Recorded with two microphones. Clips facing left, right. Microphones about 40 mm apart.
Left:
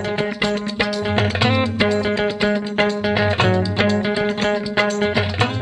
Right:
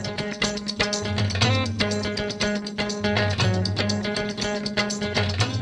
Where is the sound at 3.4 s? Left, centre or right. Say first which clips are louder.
Left 8 dB; left.